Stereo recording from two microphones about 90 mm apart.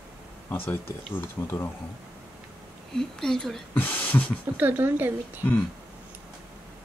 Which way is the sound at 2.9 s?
5° left (ahead or behind).